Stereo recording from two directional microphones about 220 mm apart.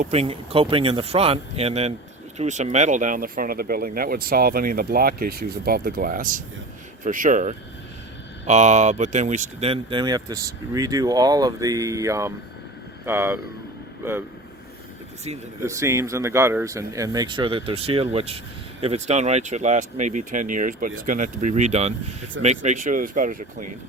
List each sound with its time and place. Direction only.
0.0 s speech: 30° right (ahead or behind); by 14.3 s 10° right (ahead or behind)
15.6 s speech: 15° right (ahead or behind); by 23.6 s 35° right (ahead or behind)